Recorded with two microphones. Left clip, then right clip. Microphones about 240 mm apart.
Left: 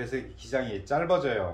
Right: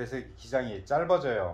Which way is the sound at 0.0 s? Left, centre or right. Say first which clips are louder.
Left 3 dB; right.